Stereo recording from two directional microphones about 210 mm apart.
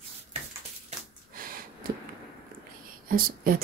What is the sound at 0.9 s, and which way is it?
Snort, 45° right (ahead or behind).